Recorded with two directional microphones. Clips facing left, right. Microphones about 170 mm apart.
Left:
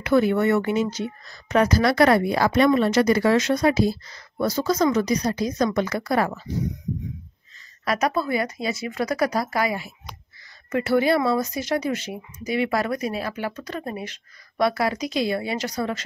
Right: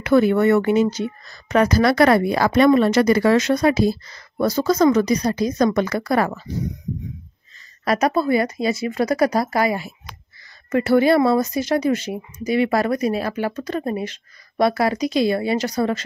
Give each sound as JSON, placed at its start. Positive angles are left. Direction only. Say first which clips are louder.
{"t": 0.0, "sound": "a woman's voice", "louder": "right 4 dB", "side_deg": -60}
{"t": 7.8, "sound": "speech", "louder": "right 4 dB", "side_deg": -35}